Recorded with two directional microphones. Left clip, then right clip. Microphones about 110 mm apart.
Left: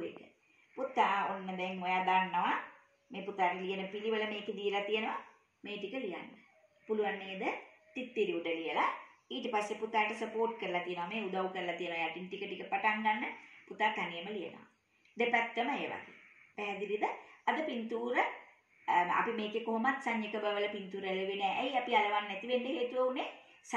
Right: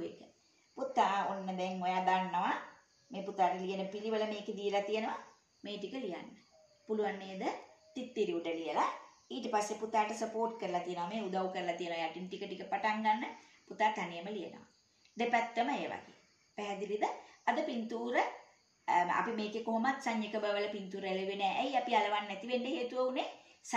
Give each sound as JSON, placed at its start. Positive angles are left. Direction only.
{"t": 0.7, "sound": "a woman's voice", "side_deg": -25}